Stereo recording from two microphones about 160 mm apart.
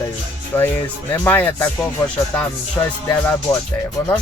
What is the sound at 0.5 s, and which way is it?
Speech, 15° left (ahead or behind).